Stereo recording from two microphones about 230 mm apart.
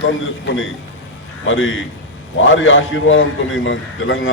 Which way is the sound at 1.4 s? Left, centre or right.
Left.